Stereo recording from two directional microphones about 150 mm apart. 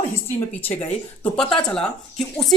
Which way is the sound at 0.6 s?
10° left (ahead or behind).